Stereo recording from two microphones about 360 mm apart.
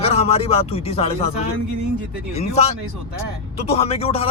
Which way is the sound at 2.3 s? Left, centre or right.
Centre.